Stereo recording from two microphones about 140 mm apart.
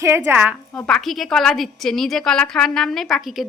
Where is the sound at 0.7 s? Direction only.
5° left (ahead or behind).